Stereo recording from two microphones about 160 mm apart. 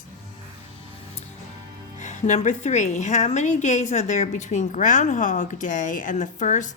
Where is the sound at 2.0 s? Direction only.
50° left (ahead or behind).